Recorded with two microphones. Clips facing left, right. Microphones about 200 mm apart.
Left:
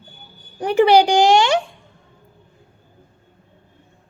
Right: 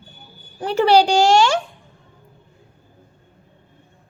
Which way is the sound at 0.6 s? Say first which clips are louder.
Left 2 dB; 15° left (ahead or behind).